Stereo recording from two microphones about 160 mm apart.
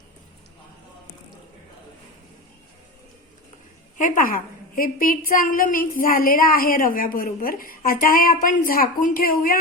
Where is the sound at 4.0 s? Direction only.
55° left (ahead or behind).